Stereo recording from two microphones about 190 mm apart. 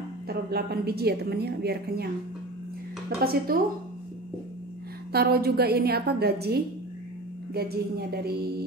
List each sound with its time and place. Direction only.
0.3 s a woman's voice: 55° right (ahead or behind)
3.2 s a woman's voice: 50° right (ahead or behind)
5.1 s a woman's voice: 55° right (ahead or behind)